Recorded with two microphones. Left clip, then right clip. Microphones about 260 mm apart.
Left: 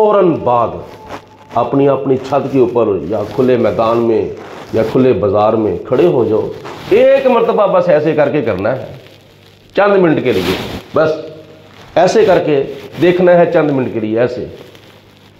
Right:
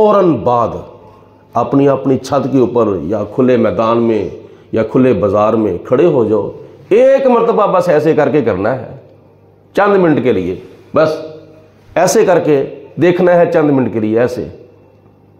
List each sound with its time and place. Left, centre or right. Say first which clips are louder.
0.0 s speech: right 1 dB; right